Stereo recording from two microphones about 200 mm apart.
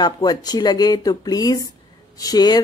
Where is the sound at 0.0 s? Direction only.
20° left (ahead or behind).